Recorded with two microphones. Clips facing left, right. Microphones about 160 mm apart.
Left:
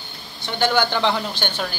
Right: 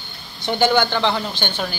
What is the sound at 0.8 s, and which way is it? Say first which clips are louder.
Speech: right 1 dB; 5° left (ahead or behind).